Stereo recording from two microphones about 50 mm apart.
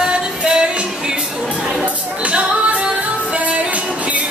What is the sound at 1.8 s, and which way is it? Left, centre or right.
Music, right.